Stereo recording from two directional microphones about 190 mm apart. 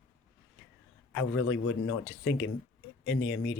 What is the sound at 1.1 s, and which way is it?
Speech, 90° left.